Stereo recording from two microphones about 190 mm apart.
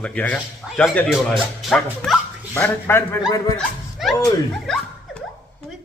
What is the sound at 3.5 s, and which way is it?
Speech, centre (ahead or behind).